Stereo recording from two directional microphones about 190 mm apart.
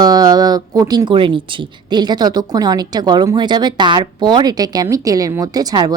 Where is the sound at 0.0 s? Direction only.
20° right (ahead or behind).